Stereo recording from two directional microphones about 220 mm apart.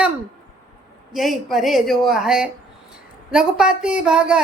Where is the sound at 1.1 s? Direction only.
Centre (ahead or behind).